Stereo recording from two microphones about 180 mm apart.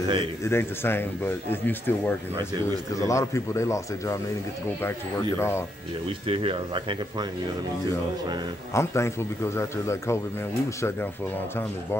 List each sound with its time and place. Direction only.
0.4 s speech: 15° left (ahead or behind)
5.4 s speech: 15° left (ahead or behind)
6.2 s speech: 30° right (ahead or behind)
8.7 s speech: 15° left (ahead or behind)